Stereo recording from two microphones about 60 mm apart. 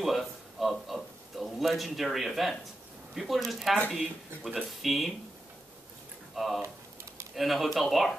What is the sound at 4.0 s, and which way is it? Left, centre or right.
Speech, right.